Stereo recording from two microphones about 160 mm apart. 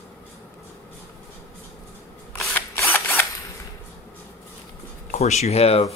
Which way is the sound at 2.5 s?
10° left (ahead or behind).